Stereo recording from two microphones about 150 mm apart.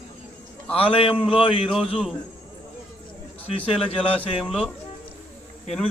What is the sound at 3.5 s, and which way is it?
Speech, 40° left (ahead or behind).